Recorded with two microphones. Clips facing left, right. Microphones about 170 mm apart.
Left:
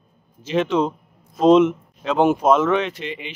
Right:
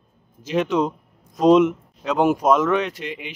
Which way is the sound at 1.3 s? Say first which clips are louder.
Left 1 dB; 15° right (ahead or behind).